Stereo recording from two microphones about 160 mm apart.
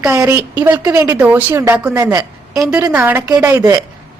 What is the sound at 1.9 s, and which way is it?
Speech, 25° right (ahead or behind).